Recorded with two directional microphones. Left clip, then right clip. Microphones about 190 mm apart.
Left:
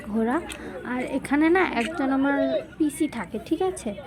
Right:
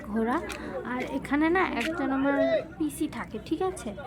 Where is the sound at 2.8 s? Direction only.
20° left (ahead or behind).